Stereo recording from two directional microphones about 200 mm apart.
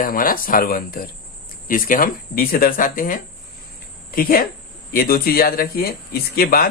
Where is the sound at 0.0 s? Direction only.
45° left (ahead or behind).